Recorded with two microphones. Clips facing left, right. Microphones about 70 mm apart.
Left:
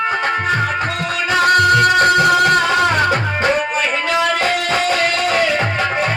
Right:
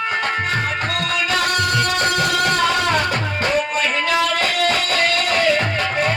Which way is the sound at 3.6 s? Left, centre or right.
Left.